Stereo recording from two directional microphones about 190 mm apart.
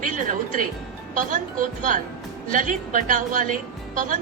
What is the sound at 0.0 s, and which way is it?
Speech, 45° right (ahead or behind).